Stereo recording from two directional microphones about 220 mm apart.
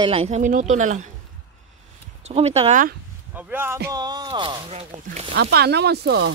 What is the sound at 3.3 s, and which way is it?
Speech, 10° right (ahead or behind).